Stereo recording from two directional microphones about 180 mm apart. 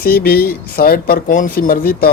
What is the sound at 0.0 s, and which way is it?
Speech, 55° left (ahead or behind).